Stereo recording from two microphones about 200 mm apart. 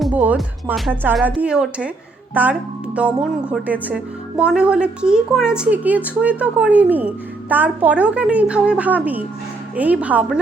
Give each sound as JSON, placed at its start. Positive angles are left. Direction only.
{"t": 0.0, "sound": "speech", "side_deg": -5}